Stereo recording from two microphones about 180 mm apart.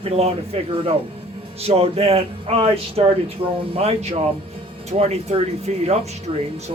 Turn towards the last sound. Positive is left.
turn(degrees=-30)  # may be behind; listen again after turning